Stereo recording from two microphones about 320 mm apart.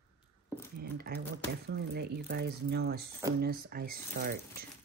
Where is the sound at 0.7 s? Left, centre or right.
Right.